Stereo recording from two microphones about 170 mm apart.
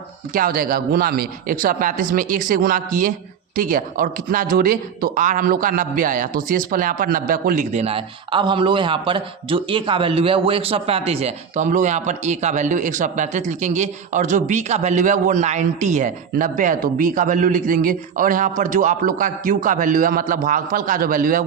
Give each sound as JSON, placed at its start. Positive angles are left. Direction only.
{"t": 0.3, "sound": "speech", "side_deg": -55}